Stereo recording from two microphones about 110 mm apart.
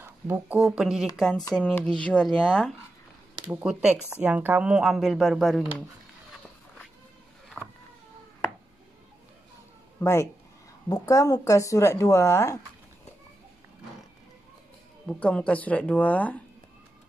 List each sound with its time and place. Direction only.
0.0 s a sound: 20° right (ahead or behind)
0.6 s speech: 5° right (ahead or behind)
3.4 s speech: 10° right (ahead or behind)
7.6 s power windows: 15° right (ahead or behind)
9.9 s speech: 25° left (ahead or behind)
15.0 s speech: 10° left (ahead or behind)